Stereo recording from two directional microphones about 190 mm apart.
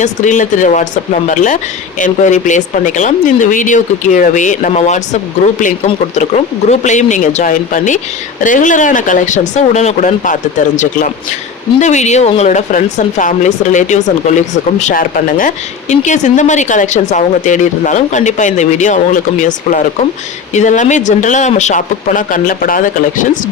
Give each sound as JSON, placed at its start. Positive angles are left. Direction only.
{"t": 0.0, "sound": "speech", "side_deg": 40}
{"t": 2.0, "sound": "speech", "side_deg": 40}
{"t": 6.7, "sound": "speech", "side_deg": 40}
{"t": 11.8, "sound": "speech", "side_deg": 40}